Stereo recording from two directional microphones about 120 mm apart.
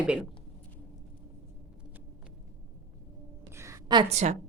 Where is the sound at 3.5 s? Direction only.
25° right (ahead or behind).